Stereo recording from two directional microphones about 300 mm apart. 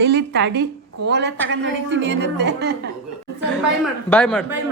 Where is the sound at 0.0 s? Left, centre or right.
Right.